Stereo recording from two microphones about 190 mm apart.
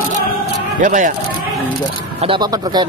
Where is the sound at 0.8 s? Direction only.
40° right (ahead or behind).